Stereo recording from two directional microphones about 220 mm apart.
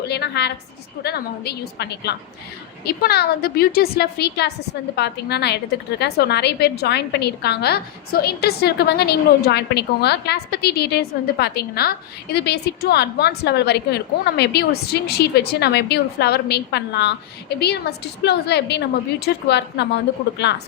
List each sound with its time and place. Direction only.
0.1 s a woman's voice: 50° left (ahead or behind)